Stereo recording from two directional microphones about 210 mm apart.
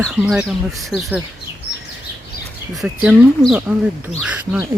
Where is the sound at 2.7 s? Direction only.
5° right (ahead or behind).